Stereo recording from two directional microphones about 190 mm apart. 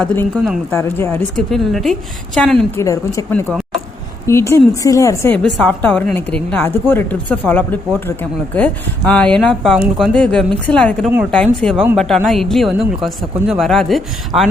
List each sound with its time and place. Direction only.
0.0 s speech: 5° left (ahead or behind)
0.7 s speech: 15° left (ahead or behind)
2.8 s speech: 15° left (ahead or behind); by 14.5 s centre (ahead or behind)